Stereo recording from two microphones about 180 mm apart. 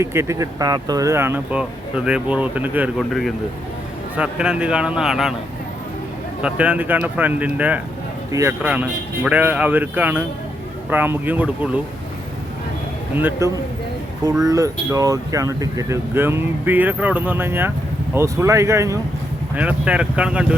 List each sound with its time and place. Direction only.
0.0 s a man's voice: 15° right (ahead or behind)
6.4 s speech: 10° right (ahead or behind)
13.1 s speech: 10° right (ahead or behind)